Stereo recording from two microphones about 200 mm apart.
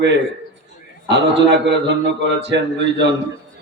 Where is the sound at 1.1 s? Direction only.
60° right (ahead or behind).